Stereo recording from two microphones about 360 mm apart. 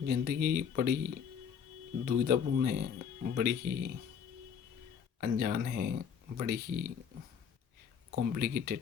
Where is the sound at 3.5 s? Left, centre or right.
Right.